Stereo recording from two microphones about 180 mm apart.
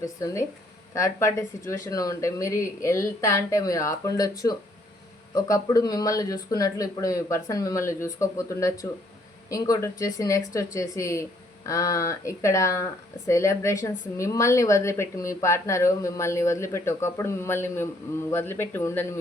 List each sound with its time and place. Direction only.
0.2 s speech: 20° left (ahead or behind)